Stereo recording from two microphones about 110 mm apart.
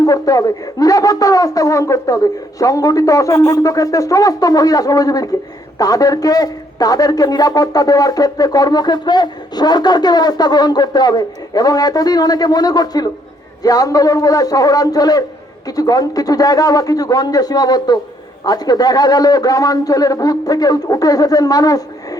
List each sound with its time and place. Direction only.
0.0 s a man's voice: 35° left (ahead or behind)